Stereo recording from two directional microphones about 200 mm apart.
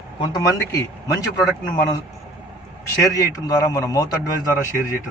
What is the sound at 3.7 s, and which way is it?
Speech, 15° left (ahead or behind).